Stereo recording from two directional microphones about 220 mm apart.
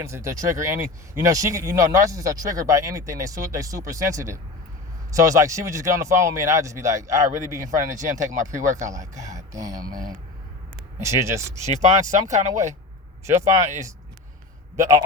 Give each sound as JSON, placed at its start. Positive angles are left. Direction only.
{"t": 0.0, "sound": "speech", "side_deg": -15}
{"t": 8.3, "sound": "speech", "side_deg": -35}
{"t": 9.1, "sound": "speech", "side_deg": -15}
{"t": 11.5, "sound": "speech", "side_deg": -30}
{"t": 13.2, "sound": "speech", "side_deg": -10}
{"t": 14.8, "sound": "speech", "side_deg": -15}